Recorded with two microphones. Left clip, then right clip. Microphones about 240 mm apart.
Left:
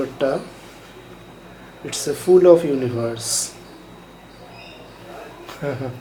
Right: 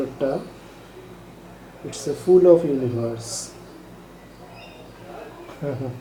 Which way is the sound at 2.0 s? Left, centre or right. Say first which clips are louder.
Left 2 dB; right.